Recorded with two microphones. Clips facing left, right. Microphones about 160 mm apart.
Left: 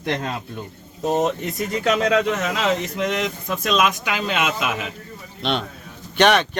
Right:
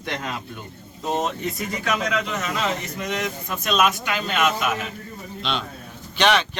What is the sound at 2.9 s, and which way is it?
Speech, 90° left.